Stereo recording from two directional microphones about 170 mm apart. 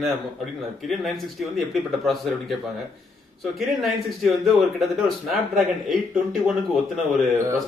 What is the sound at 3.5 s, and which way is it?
A man's voice, centre (ahead or behind).